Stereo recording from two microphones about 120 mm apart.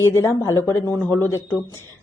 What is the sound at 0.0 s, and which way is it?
Speech, 25° left (ahead or behind).